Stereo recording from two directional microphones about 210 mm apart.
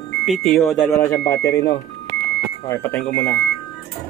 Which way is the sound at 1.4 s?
15° left (ahead or behind).